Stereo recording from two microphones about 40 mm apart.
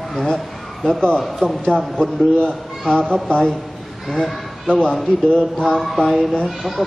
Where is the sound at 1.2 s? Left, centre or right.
Centre.